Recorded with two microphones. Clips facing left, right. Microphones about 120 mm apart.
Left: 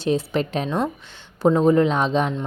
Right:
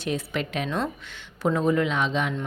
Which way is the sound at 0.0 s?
30° left (ahead or behind).